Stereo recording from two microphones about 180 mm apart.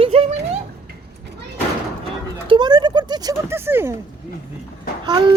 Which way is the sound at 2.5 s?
25° right (ahead or behind).